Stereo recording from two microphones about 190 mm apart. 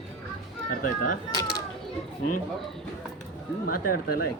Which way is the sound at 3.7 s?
50° left (ahead or behind).